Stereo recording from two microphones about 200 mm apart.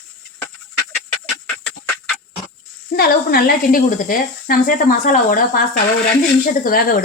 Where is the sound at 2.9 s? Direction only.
50° left (ahead or behind).